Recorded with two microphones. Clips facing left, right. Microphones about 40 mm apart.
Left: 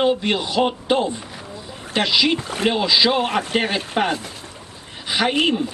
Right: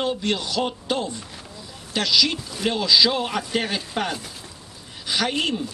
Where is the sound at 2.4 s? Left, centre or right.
Left.